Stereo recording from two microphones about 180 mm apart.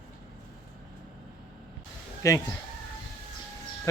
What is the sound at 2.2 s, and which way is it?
Speech, 20° left (ahead or behind).